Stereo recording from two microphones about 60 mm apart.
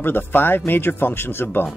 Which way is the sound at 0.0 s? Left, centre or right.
Left.